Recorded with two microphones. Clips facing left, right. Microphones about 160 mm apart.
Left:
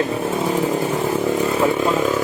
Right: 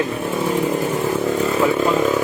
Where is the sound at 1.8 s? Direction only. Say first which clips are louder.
Right 1 dB; centre (ahead or behind).